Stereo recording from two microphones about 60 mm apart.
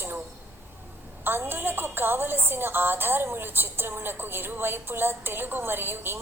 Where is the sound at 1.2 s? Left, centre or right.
Right.